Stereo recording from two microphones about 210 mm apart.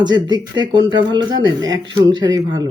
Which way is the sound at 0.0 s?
20° right (ahead or behind).